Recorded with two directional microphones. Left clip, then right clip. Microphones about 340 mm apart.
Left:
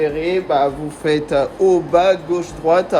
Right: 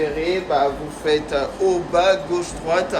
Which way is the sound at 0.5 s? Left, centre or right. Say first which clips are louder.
Left 3 dB; centre.